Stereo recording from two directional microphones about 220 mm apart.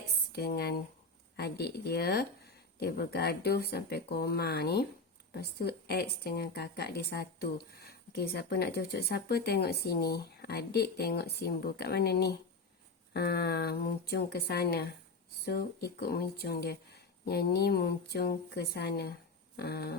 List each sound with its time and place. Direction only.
0.3 s speech: 45° left (ahead or behind)